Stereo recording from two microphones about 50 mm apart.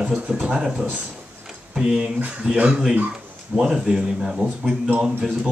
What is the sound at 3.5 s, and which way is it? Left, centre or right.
Speech, centre.